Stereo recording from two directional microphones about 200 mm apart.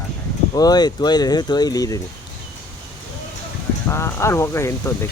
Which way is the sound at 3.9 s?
15° left (ahead or behind).